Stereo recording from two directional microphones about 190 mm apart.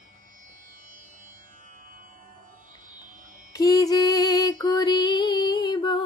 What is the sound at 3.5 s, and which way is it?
Music, 20° left (ahead or behind).